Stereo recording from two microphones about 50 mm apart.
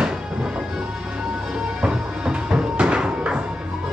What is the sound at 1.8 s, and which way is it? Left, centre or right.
Music, centre.